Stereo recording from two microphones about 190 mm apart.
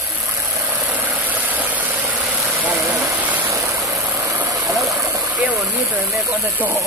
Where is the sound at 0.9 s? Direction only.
10° right (ahead or behind).